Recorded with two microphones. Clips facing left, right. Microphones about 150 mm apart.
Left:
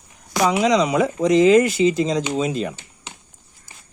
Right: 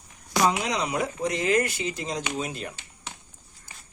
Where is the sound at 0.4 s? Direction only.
90° left.